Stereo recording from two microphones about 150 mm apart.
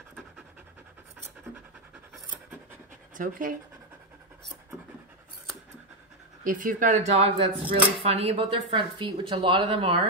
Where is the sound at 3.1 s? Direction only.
65° right (ahead or behind).